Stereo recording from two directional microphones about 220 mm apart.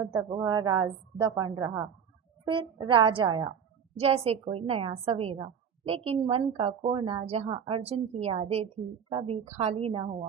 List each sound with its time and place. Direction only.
0.0 s a woman's voice: 15° right (ahead or behind)